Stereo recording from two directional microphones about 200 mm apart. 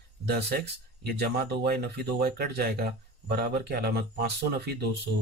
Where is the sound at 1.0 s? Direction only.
50° right (ahead or behind).